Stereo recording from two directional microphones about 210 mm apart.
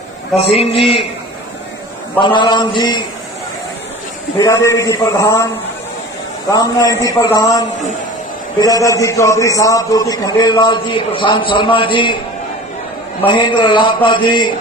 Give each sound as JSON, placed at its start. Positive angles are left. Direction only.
{"t": 0.5, "sound": "a man's voice", "side_deg": 30}
{"t": 2.2, "sound": "a man's voice", "side_deg": 20}
{"t": 4.4, "sound": "a man's voice", "side_deg": 15}
{"t": 6.5, "sound": "a man's voice", "side_deg": 15}
{"t": 13.2, "sound": "a man's voice", "side_deg": 20}